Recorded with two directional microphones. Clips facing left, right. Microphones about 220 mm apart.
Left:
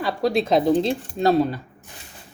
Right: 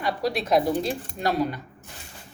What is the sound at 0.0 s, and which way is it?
Speech, 25° left (ahead or behind).